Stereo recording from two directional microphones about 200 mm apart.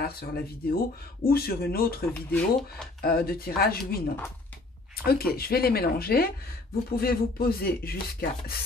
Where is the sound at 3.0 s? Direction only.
50° left (ahead or behind).